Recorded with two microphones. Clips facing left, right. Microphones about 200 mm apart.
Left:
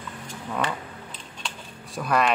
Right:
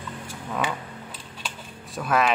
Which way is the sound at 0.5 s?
5° right (ahead or behind).